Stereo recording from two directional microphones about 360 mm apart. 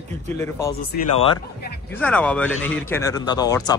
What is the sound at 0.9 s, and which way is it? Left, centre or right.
Speech, left.